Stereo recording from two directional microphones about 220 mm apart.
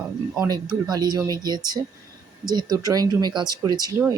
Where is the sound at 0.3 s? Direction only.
15° right (ahead or behind).